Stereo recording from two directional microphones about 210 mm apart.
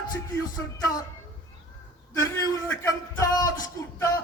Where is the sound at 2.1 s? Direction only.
15° left (ahead or behind).